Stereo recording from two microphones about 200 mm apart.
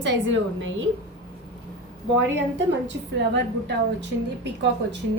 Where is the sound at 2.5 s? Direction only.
60° right (ahead or behind).